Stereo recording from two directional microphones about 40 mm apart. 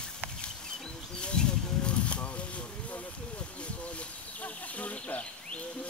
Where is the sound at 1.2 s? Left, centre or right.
Left.